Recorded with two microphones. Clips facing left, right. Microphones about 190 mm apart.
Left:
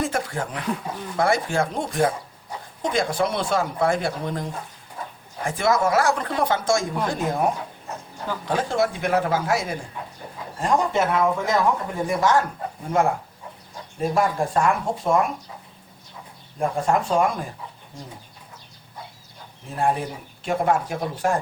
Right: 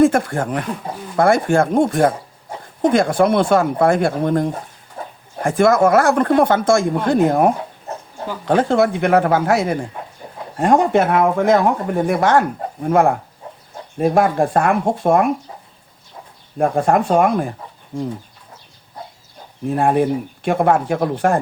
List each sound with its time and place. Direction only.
0.0 s speech: 55° right (ahead or behind)
5.0 s chicken: 50° right (ahead or behind)
5.4 s speech: 50° right (ahead or behind)
16.6 s speech: 60° right (ahead or behind)
19.7 s speech: 60° right (ahead or behind)